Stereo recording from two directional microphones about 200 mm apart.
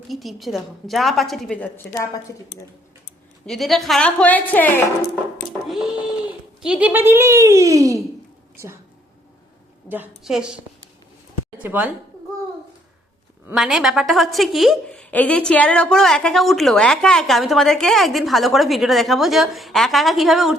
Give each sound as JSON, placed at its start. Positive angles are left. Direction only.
{"t": 0.1, "sound": "a woman's voice", "side_deg": 0}
{"t": 3.4, "sound": "a woman's voice", "side_deg": 0}
{"t": 5.6, "sound": "a sound", "side_deg": 0}
{"t": 9.9, "sound": "a woman's voice", "side_deg": -5}
{"t": 11.6, "sound": "speech", "side_deg": -10}
{"t": 13.6, "sound": "a woman's voice", "side_deg": 0}